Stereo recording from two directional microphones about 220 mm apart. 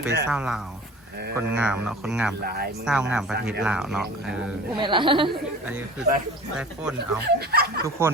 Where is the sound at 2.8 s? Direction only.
5° right (ahead or behind).